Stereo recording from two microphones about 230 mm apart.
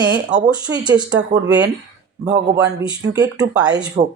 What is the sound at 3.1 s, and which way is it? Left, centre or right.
Speech, centre.